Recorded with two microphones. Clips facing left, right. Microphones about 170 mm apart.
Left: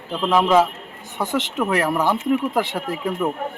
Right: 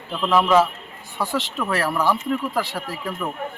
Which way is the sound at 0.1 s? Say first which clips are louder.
Left 1 dB; 15° left (ahead or behind).